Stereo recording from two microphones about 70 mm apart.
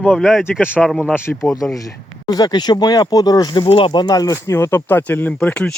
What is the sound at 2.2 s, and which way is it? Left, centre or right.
Speech, left.